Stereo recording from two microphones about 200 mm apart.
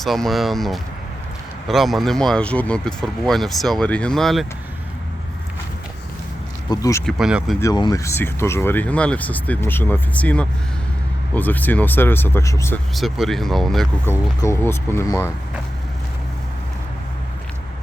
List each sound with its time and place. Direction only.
0.0 s speech: centre (ahead or behind)
6.7 s speech: 15° left (ahead or behind)
7.0 s speech: 5° right (ahead or behind)
7.6 s speech: 20° left (ahead or behind)
12.9 s speech: centre (ahead or behind)